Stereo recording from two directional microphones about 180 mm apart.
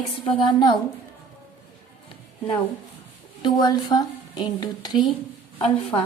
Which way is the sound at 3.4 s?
25° left (ahead or behind).